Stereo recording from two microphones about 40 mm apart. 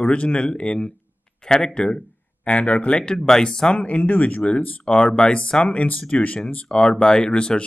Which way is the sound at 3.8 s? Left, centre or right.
Left.